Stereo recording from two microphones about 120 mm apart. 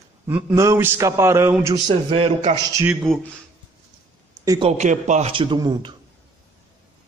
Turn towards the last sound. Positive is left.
turn(degrees=-35)  # may be behind; listen again after turning